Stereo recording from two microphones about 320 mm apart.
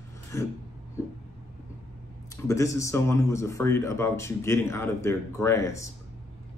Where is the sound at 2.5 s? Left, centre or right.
Centre.